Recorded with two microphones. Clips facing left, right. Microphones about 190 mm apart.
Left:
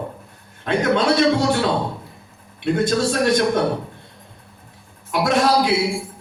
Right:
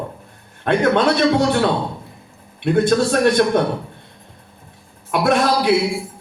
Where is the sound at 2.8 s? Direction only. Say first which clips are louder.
Right 4 dB; 60° right (ahead or behind).